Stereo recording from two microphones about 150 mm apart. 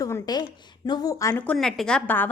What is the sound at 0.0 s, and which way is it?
A woman's voice, 25° left (ahead or behind).